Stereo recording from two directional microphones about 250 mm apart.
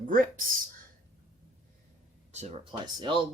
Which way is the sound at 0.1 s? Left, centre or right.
Right.